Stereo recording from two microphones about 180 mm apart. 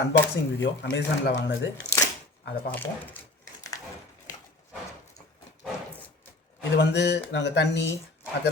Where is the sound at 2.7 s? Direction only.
10° left (ahead or behind).